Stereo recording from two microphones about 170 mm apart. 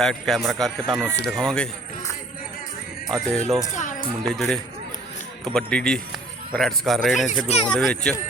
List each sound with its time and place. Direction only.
0.0 s speech: centre (ahead or behind)
3.2 s speech: centre (ahead or behind)
3.7 s speech: 45° left (ahead or behind)
4.4 s speech: 5° left (ahead or behind)
7.3 s speech: 40° left (ahead or behind)
7.7 s speech: 5° left (ahead or behind)